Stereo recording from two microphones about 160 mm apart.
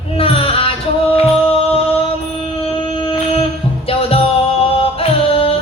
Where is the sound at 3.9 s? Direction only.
35° left (ahead or behind).